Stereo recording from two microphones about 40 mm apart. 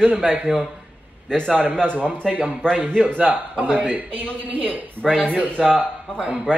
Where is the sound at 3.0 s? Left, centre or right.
Right.